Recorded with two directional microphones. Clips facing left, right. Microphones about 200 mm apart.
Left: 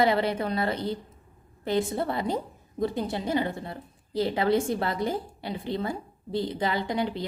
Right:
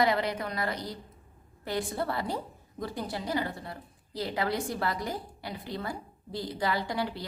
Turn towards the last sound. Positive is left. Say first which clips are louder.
# left 4 dB
turn(degrees=20)  # may be behind; listen again after turning